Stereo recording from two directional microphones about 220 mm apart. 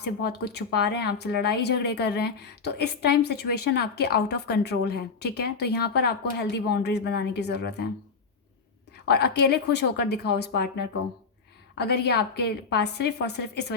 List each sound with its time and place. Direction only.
0.0 s speech: 50° left (ahead or behind)
9.0 s speech: 50° left (ahead or behind)
11.8 s speech: 50° left (ahead or behind)